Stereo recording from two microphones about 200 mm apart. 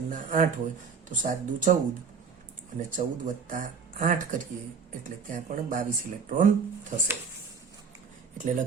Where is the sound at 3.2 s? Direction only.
40° right (ahead or behind).